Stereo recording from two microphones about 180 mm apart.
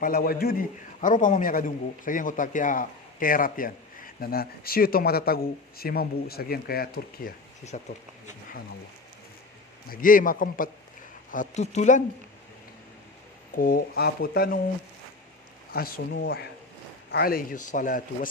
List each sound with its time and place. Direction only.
0.0 s a man's voice: 55° left (ahead or behind)
7.7 s a man's voice: 40° left (ahead or behind)
9.9 s a man's voice: 50° left (ahead or behind)
13.6 s speech: 55° left (ahead or behind)
15.7 s a man's voice: 60° left (ahead or behind)